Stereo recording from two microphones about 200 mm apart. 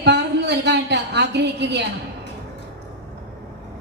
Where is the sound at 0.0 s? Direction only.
60° right (ahead or behind).